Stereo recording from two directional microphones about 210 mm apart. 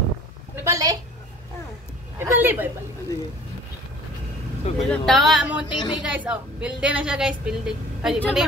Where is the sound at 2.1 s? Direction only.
10° right (ahead or behind).